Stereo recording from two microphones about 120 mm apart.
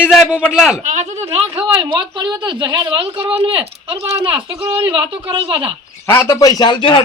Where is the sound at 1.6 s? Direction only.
40° right (ahead or behind).